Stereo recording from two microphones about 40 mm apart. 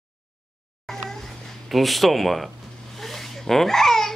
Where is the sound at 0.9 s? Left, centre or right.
Centre.